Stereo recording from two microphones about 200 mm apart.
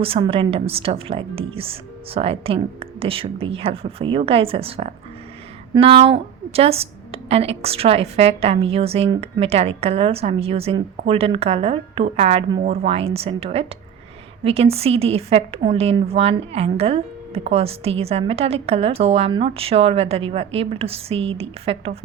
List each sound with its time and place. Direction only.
0.0 s a woman's voice: 30° right (ahead or behind)